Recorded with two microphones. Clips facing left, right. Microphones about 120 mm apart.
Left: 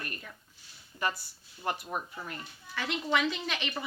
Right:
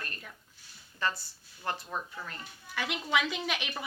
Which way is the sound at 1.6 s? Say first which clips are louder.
Left 2 dB; 15° left (ahead or behind).